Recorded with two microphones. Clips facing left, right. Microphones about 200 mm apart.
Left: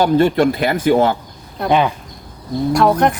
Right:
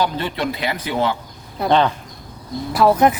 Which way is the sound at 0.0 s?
50° left (ahead or behind).